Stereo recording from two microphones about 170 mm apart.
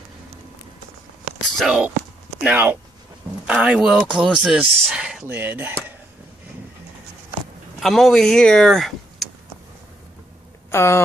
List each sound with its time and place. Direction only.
1.6 s speech: 5° right (ahead or behind)
7.8 s speech: centre (ahead or behind)
10.7 s speech: 15° left (ahead or behind)